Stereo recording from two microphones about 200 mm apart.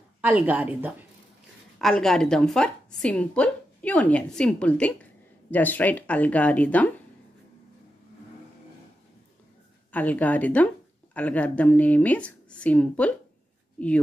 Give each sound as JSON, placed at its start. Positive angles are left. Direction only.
{"t": 0.2, "sound": "a woman's voice", "side_deg": -5}
{"t": 9.9, "sound": "speech", "side_deg": 10}